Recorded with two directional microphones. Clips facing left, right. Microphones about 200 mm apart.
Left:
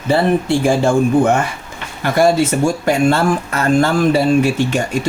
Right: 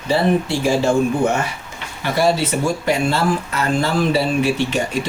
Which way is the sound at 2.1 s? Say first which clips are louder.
Left 4 dB; 50° left (ahead or behind).